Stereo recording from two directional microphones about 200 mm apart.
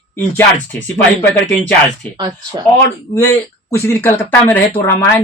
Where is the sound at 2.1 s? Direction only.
20° right (ahead or behind).